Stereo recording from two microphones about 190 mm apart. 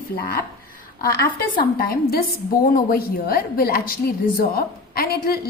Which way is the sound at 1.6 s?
55° left (ahead or behind).